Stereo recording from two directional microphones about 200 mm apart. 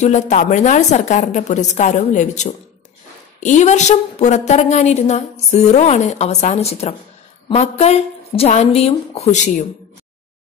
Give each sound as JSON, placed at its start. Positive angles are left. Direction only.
{"t": 0.0, "sound": "a woman's voice", "side_deg": 35}